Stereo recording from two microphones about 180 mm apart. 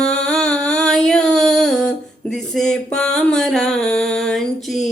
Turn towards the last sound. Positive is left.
turn(degrees=0)  # may be behind; listen again after turning